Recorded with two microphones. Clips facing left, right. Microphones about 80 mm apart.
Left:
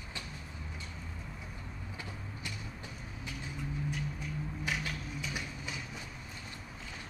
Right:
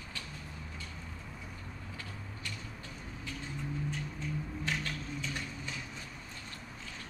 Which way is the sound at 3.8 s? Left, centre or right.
Centre.